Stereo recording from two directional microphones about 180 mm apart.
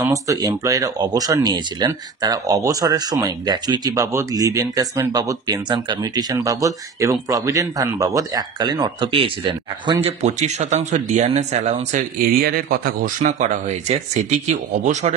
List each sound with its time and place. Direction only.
0.0 s speech: 20° right (ahead or behind)
10.0 s speech: 40° right (ahead or behind)